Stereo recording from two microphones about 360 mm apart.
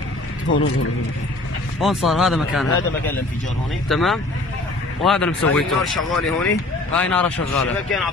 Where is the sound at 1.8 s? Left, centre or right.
Centre.